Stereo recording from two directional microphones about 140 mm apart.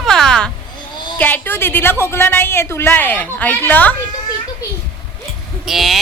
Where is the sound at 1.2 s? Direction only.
15° left (ahead or behind).